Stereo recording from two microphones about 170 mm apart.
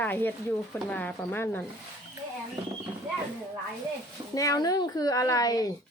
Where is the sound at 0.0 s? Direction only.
10° left (ahead or behind).